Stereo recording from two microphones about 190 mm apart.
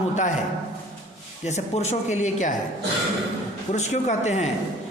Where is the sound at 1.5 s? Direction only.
35° left (ahead or behind).